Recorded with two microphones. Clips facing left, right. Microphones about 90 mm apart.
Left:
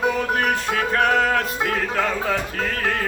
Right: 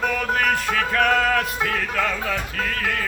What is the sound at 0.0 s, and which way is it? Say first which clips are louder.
Music: left 1 dB; 25° left (ahead or behind).